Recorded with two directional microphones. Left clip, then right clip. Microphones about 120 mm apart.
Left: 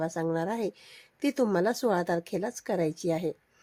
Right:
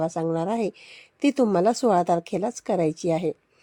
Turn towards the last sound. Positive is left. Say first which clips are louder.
# right 5 dB
turn(degrees=-40)  # may be behind; listen again after turning